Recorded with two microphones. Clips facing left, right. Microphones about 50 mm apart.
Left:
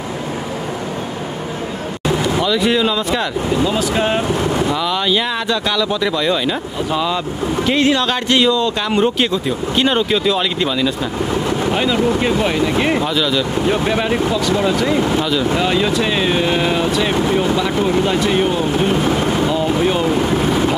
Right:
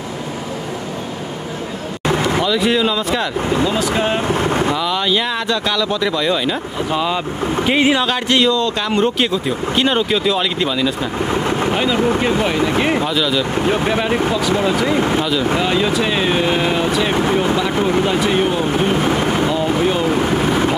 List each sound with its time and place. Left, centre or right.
2.0 s a sound: right
2.4 s speech: centre
4.3 s boat: right
4.7 s speech: centre
7.6 s speech: centre
8.1 s speech: centre
11.2 s speech: right
11.7 s speech: centre
13.7 s speech: centre
15.6 s speech: centre
20.1 s speech: centre